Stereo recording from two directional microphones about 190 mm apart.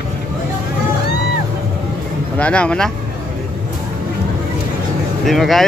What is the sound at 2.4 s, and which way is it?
Speech, 5° left (ahead or behind).